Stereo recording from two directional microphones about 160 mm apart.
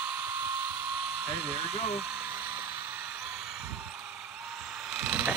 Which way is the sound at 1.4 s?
5° right (ahead or behind).